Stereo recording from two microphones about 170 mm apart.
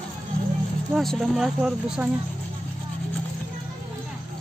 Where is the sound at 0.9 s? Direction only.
Centre (ahead or behind).